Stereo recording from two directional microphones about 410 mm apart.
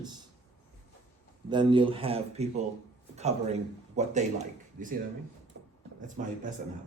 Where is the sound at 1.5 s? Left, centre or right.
Centre.